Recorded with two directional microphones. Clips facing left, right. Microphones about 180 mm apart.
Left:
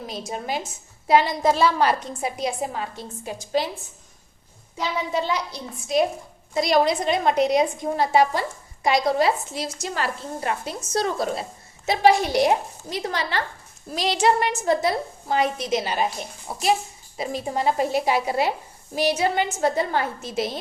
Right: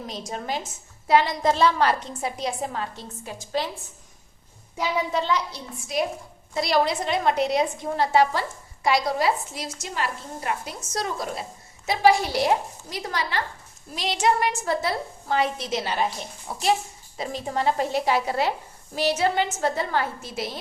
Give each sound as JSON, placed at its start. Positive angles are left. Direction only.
{"t": 0.1, "sound": "a woman's voice", "side_deg": 10}
{"t": 5.1, "sound": "a woman's voice", "side_deg": 10}
{"t": 13.9, "sound": "a woman's voice", "side_deg": 35}